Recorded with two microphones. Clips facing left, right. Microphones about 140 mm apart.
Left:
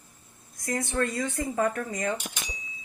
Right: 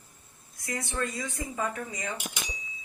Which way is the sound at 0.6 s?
50° left (ahead or behind).